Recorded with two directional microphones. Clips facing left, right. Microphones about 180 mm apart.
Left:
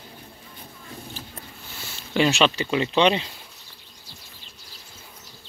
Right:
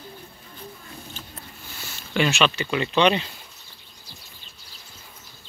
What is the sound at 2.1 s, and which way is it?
Speech, 30° left (ahead or behind).